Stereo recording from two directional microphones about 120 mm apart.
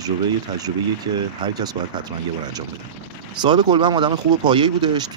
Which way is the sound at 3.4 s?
40° right (ahead or behind).